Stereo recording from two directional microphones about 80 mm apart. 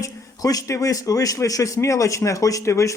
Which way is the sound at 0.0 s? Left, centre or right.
Left.